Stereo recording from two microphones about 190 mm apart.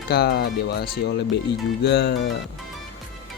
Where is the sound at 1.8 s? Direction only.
60° left (ahead or behind).